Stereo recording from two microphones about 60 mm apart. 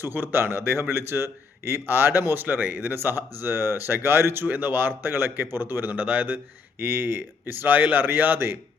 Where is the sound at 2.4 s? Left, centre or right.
Right.